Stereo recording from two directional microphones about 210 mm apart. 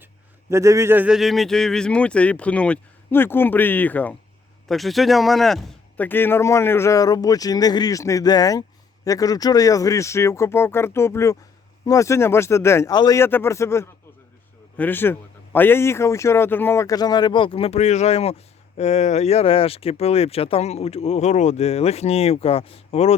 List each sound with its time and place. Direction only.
0.5 s speech: 15° right (ahead or behind); by 23.1 s 30° left (ahead or behind)